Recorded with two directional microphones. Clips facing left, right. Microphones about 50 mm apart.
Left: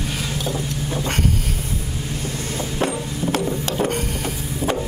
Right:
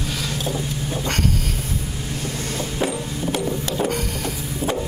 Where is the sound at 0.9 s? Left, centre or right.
Centre.